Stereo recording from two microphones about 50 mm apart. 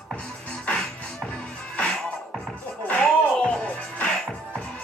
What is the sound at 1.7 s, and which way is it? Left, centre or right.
Music, centre.